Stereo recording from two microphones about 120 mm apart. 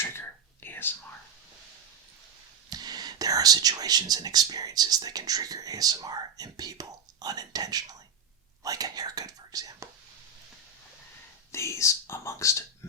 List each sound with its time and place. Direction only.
0.0 s whispering: 20° left (ahead or behind)
2.6 s speech: 35° right (ahead or behind)
11.5 s speech: 25° left (ahead or behind)